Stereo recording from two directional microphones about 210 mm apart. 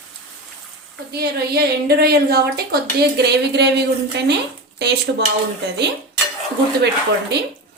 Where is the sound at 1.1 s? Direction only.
50° right (ahead or behind).